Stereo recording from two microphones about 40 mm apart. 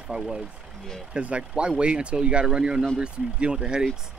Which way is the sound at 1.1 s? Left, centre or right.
Right.